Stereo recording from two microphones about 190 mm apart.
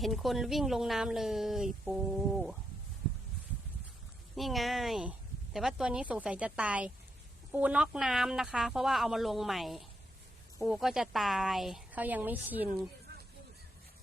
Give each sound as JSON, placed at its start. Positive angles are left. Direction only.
{"t": 0.0, "sound": "speech", "side_deg": 0}
{"t": 4.4, "sound": "speech", "side_deg": 0}